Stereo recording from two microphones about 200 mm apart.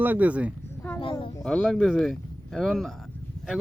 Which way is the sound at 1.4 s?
5° left (ahead or behind).